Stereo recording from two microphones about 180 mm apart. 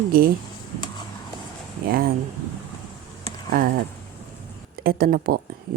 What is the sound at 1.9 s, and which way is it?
Speech, 55° right (ahead or behind).